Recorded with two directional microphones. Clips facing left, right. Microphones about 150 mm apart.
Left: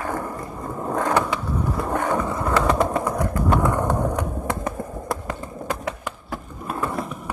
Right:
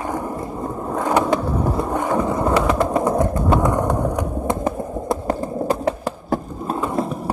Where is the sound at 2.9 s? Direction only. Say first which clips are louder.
Right 5 dB; 25° right (ahead or behind).